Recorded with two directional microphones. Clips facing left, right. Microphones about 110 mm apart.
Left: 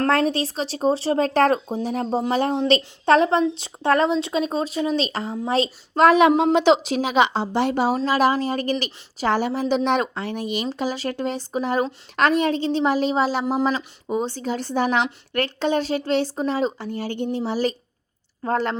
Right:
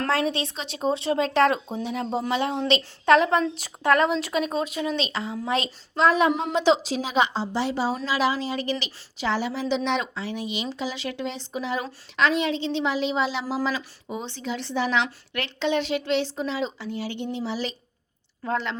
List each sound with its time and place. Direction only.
0.3 s speech: 40° left (ahead or behind)
6.0 s a sound: 75° left (ahead or behind)
6.4 s speech: 65° left (ahead or behind); by 18.8 s 45° left (ahead or behind)